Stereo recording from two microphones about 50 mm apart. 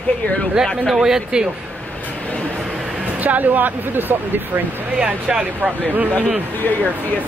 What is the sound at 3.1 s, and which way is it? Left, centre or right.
Speech, right.